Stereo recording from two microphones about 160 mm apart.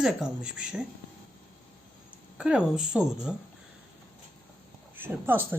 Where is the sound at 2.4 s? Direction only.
5° right (ahead or behind).